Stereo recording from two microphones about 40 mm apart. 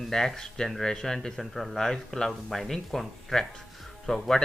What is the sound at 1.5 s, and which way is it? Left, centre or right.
Speech, centre.